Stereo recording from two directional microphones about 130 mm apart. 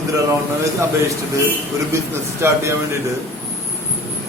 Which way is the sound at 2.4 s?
20° right (ahead or behind).